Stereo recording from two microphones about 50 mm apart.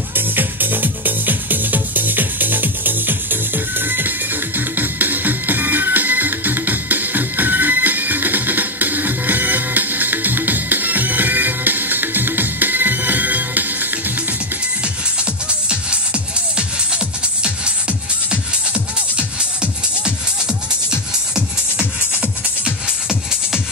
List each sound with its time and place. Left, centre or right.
0.1 s music: right
15.7 s music: right
21.7 s music: right